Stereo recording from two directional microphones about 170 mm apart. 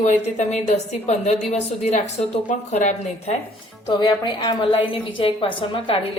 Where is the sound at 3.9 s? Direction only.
25° left (ahead or behind).